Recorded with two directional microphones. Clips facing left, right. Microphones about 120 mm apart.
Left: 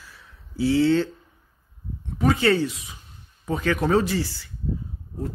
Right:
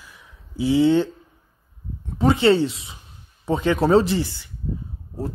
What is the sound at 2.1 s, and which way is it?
Speech, 25° right (ahead or behind).